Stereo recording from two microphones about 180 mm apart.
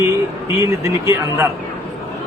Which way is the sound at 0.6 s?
15° right (ahead or behind).